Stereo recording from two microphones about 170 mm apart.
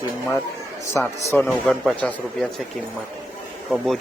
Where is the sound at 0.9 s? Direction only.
10° left (ahead or behind).